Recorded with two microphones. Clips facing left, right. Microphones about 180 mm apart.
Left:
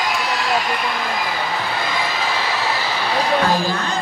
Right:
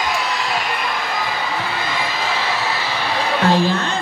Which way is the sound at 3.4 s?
25° right (ahead or behind).